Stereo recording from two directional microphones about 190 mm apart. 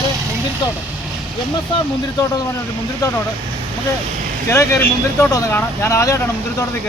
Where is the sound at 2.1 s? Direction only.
20° left (ahead or behind).